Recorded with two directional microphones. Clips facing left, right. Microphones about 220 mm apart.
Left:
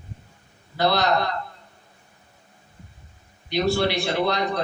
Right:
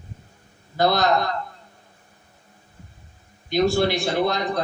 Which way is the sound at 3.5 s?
45° right (ahead or behind).